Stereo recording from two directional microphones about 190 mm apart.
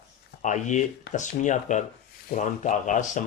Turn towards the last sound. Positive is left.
turn(degrees=40)  # may be behind; listen again after turning